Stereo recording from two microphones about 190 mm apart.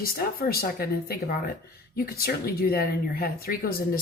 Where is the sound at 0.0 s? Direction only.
50° left (ahead or behind).